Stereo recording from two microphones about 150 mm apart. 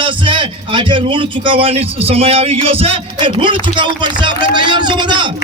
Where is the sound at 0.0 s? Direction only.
35° right (ahead or behind).